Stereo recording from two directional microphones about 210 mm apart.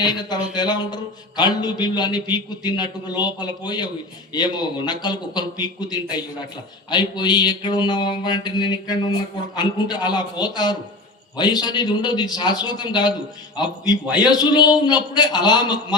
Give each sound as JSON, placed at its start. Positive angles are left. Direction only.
{"t": 0.0, "sound": "speech", "side_deg": 20}